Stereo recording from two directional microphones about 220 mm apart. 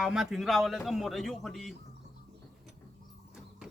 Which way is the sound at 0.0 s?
Centre (ahead or behind).